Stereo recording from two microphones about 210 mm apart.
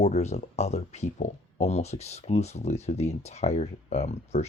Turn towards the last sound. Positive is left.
turn(degrees=30)  # may be behind; listen again after turning